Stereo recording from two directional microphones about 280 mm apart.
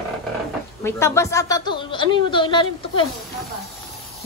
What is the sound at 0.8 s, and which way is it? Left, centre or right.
Speech, centre.